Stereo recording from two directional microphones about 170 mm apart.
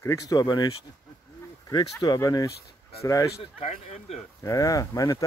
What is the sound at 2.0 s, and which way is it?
Speech, 25° left (ahead or behind).